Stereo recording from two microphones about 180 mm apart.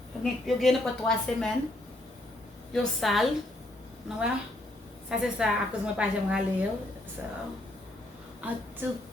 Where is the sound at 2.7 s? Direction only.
Centre (ahead or behind).